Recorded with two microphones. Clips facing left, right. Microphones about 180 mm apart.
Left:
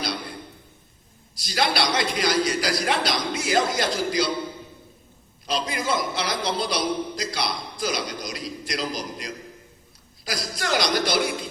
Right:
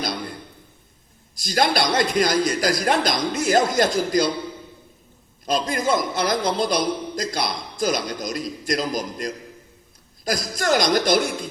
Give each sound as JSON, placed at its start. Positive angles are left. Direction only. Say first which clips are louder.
{"t": 0.0, "sound": "a sound", "louder": "right 2 dB", "side_deg": -45}
{"t": 1.4, "sound": "a man's voice", "louder": "right 4 dB", "side_deg": -45}
{"t": 5.5, "sound": "a man's voice", "louder": "right 4 dB", "side_deg": -45}